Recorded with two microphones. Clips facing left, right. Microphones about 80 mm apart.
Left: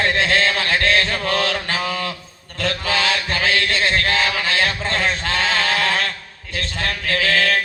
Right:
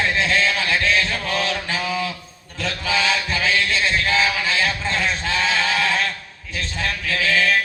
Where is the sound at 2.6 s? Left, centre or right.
Left.